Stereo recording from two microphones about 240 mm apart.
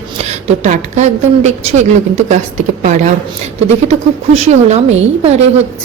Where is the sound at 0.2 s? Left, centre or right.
Right.